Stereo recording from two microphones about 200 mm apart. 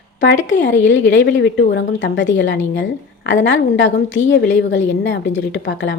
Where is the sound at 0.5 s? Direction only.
65° left (ahead or behind).